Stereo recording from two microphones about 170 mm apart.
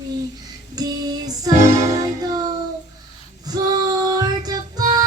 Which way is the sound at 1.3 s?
20° right (ahead or behind).